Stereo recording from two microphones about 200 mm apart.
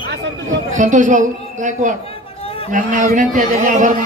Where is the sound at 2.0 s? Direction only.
30° left (ahead or behind).